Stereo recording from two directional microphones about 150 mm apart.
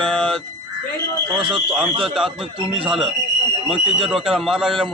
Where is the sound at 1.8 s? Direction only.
5° right (ahead or behind).